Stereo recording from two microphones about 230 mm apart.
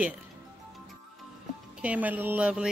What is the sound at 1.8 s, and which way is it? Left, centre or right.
Speech, centre.